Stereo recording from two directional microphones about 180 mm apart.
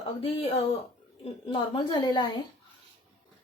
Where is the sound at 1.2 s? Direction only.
30° left (ahead or behind).